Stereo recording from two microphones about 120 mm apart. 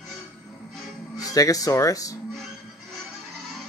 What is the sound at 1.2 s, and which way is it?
Speech, 30° left (ahead or behind).